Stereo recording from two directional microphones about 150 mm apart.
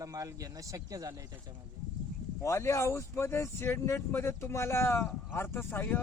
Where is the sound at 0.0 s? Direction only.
25° right (ahead or behind).